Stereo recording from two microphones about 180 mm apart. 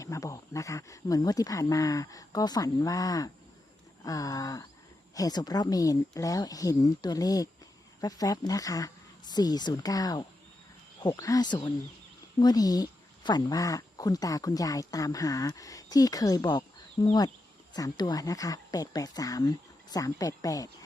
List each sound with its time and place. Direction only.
0.0 s speech: 15° left (ahead or behind)